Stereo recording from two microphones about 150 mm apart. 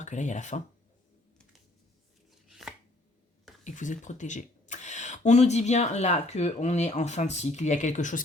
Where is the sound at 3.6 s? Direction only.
55° left (ahead or behind).